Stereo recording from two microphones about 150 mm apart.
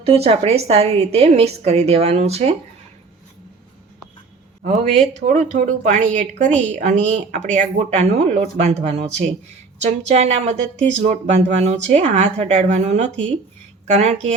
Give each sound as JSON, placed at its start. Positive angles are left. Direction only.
{"t": 0.0, "sound": "a woman's voice", "side_deg": -40}
{"t": 4.6, "sound": "a woman's voice", "side_deg": -55}